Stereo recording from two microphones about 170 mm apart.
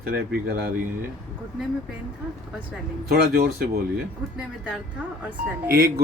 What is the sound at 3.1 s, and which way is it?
Speech, 60° right (ahead or behind).